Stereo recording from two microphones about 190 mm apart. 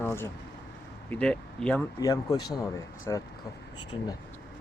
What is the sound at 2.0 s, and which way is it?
Speech, 20° left (ahead or behind).